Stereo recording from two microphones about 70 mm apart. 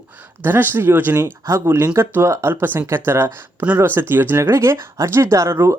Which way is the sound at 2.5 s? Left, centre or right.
Right.